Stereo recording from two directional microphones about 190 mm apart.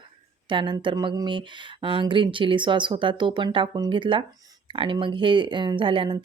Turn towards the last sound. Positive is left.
turn(degrees=-25)  # may be behind; listen again after turning